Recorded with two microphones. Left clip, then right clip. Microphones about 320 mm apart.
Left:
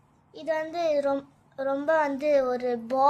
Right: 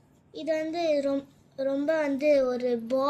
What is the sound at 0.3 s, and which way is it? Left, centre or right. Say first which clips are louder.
Speech: even; left.